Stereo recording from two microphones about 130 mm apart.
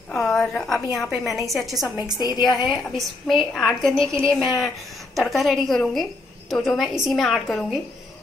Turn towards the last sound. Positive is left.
turn(degrees=0)  # may be behind; listen again after turning